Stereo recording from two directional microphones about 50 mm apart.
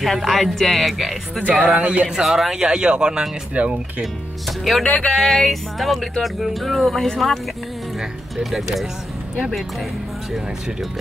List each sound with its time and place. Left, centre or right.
0.0 s speech: centre
1.8 s speech: right
2.0 s speech: centre; by 3.8 s right
4.0 s speech: centre